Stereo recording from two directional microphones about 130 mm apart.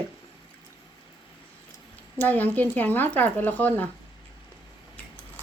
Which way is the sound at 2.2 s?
15° left (ahead or behind).